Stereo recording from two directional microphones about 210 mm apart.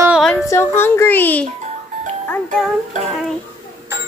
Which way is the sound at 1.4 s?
35° right (ahead or behind).